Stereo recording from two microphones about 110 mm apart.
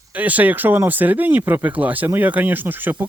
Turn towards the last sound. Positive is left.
turn(degrees=-15)  # may be behind; listen again after turning